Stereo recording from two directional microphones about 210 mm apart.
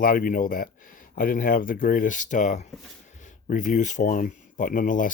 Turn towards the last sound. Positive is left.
turn(degrees=40)  # may be behind; listen again after turning